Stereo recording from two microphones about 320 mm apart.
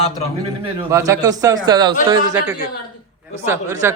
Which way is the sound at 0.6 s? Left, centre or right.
Centre.